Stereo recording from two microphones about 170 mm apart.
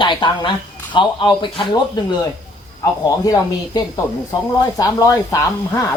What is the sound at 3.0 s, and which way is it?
Speech, 20° left (ahead or behind).